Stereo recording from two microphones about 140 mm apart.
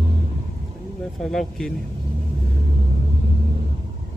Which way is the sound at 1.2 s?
5° left (ahead or behind).